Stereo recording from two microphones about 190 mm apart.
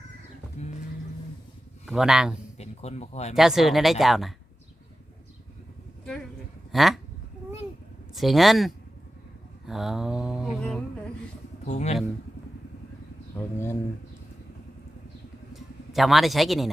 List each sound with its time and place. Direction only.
1.9 s speech: 5° right (ahead or behind)
2.6 s speech: 35° left (ahead or behind)
3.3 s speech: centre (ahead or behind)
6.7 s a sound: centre (ahead or behind)
8.1 s speech: centre (ahead or behind)
9.6 s a sound: centre (ahead or behind)
11.6 s speech: 35° left (ahead or behind)
13.3 s speech: 15° left (ahead or behind)
15.5 s speech: centre (ahead or behind)